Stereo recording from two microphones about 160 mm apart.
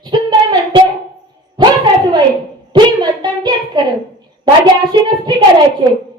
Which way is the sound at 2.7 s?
25° right (ahead or behind).